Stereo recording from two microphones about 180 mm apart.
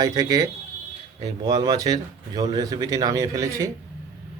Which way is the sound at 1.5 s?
20° right (ahead or behind).